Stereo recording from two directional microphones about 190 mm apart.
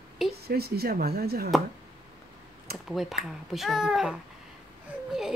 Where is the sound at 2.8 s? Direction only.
Centre (ahead or behind).